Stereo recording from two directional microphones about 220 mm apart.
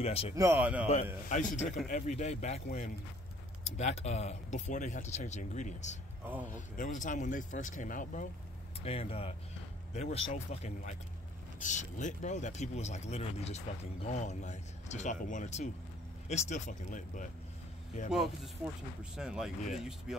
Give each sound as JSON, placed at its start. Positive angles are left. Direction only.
{"t": 0.0, "sound": "speech", "side_deg": 25}
{"t": 0.4, "sound": "speech", "side_deg": -10}
{"t": 1.3, "sound": "speech", "side_deg": 35}
{"t": 8.8, "sound": "speech", "side_deg": 25}
{"t": 18.1, "sound": "speech", "side_deg": 0}